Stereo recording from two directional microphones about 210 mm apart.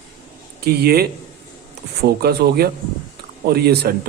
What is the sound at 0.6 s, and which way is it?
Speech, 50° right (ahead or behind).